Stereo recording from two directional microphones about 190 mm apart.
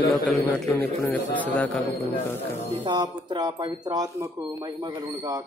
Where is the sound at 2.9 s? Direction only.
25° right (ahead or behind).